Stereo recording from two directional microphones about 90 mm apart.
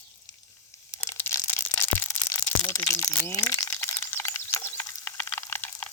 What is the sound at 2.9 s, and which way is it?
Speech, 35° left (ahead or behind).